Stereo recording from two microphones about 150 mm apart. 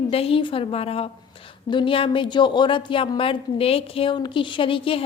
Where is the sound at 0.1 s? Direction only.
40° left (ahead or behind).